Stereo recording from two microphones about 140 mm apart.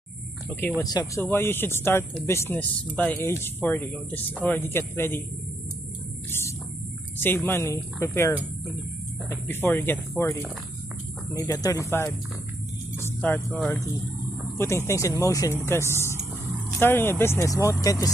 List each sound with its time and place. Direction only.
0.7 s speech: 25° left (ahead or behind)
7.2 s speech: 15° left (ahead or behind)
11.3 s speech: 25° left (ahead or behind)
14.6 s speech: 20° left (ahead or behind)
16.2 s vehicle: 10° right (ahead or behind)
16.8 s speech: 15° left (ahead or behind)